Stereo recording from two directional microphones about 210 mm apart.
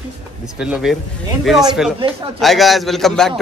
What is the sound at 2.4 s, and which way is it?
Speech, centre (ahead or behind).